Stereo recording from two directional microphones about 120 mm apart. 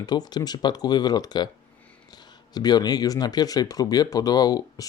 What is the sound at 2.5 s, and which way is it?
Speech, 35° left (ahead or behind).